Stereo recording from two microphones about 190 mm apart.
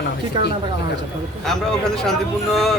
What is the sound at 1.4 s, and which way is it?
Speech, centre (ahead or behind).